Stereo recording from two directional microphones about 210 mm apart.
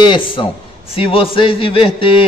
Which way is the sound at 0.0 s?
25° left (ahead or behind).